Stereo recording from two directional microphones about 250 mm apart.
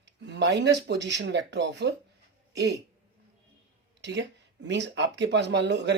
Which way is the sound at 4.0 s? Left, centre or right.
Right.